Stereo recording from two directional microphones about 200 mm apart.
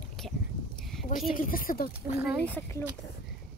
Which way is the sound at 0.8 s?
Centre (ahead or behind).